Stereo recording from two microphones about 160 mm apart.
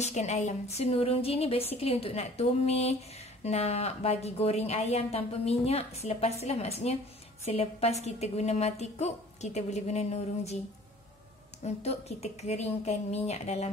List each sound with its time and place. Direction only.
0.0 s a woman's voice: 45° left (ahead or behind)
11.6 s a woman's voice: 40° left (ahead or behind)